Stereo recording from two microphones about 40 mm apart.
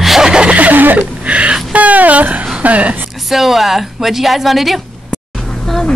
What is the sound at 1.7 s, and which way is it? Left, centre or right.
Music, right.